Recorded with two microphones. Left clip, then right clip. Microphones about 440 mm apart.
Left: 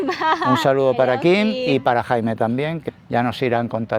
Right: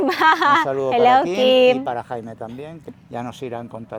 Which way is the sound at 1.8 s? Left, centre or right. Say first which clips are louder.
Left 8 dB; left.